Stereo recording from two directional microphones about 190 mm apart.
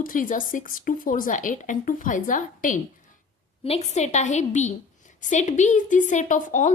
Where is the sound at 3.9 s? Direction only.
35° left (ahead or behind).